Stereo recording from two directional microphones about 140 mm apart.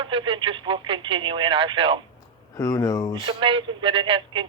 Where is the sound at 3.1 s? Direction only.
30° right (ahead or behind).